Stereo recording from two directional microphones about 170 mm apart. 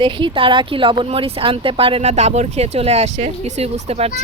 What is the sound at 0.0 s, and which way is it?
Speech, 30° right (ahead or behind).